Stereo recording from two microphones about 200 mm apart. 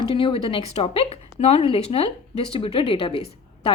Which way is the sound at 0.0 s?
25° left (ahead or behind).